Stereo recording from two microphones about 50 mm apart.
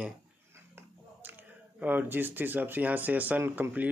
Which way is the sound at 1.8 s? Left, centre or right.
Right.